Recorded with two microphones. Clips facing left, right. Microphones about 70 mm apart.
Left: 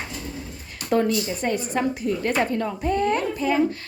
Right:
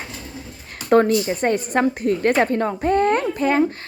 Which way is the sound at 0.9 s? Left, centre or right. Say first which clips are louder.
Right 6 dB; right.